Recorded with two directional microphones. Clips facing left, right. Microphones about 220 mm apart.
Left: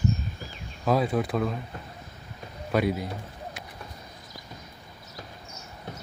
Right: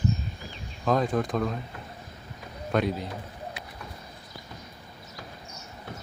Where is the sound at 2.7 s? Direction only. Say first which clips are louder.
Left 1 dB; 5° left (ahead or behind).